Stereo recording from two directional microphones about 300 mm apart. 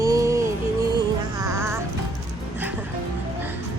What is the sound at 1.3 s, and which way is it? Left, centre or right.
Music, centre.